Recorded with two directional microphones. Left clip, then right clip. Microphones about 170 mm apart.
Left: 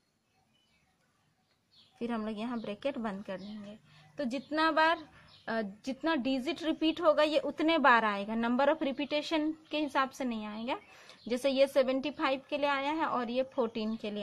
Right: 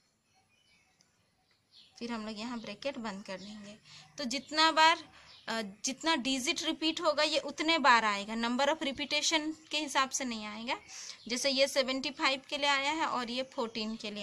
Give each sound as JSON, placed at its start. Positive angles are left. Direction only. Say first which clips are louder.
{"t": 2.0, "sound": "a woman's voice", "louder": "left 3 dB", "side_deg": 50}